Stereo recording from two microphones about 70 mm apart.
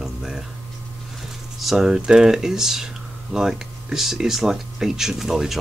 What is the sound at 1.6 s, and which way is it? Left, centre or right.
Speech, centre.